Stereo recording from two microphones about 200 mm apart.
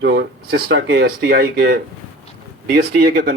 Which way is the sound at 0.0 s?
60° right (ahead or behind).